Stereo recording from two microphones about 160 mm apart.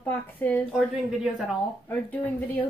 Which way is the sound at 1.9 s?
10° left (ahead or behind).